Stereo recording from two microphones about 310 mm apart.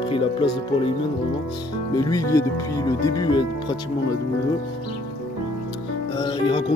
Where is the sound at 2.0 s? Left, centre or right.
Centre.